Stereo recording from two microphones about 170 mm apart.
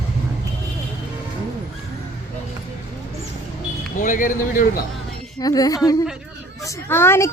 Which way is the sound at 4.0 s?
50° left (ahead or behind).